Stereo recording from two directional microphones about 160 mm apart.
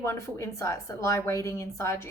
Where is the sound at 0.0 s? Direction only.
20° left (ahead or behind).